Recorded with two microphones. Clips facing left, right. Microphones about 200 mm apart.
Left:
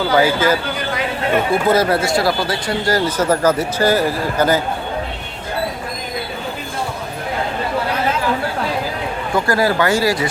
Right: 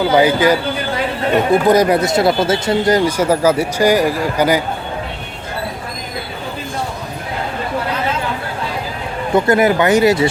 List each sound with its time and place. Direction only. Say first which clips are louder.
0.0 s speech: right 3 dB; 20° right (ahead or behind)
9.3 s speech: right 5 dB; 20° right (ahead or behind)